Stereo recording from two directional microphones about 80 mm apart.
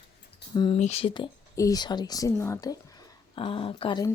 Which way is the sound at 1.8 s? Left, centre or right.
Left.